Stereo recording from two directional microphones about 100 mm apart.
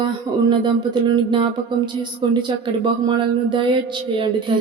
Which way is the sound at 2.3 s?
50° right (ahead or behind).